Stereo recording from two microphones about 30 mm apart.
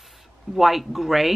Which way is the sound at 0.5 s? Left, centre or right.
Centre.